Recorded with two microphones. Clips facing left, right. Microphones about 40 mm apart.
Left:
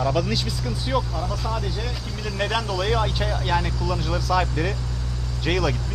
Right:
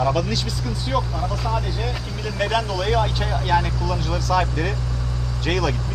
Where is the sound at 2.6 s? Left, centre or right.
Centre.